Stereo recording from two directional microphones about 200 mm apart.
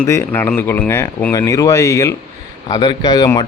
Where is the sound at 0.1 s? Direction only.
10° left (ahead or behind).